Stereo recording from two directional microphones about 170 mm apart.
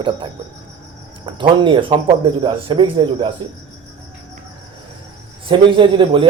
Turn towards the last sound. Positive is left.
turn(degrees=-30)  # may be behind; listen again after turning